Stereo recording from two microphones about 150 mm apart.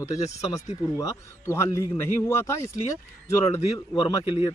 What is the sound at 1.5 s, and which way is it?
Speech, 20° left (ahead or behind).